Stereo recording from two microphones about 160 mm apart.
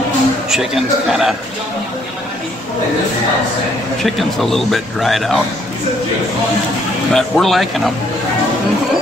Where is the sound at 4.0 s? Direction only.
Centre (ahead or behind).